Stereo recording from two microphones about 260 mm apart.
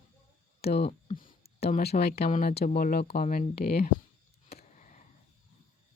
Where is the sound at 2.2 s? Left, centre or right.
Left.